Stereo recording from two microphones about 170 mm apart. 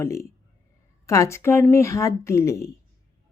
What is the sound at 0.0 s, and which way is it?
A woman's voice, 15° left (ahead or behind).